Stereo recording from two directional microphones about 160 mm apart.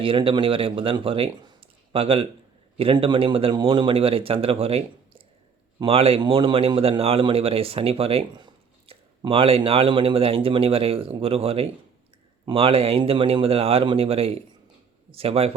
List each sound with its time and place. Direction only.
0.0 s a man's voice: 35° right (ahead or behind)